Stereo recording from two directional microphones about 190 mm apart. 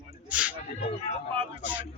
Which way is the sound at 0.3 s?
10° right (ahead or behind).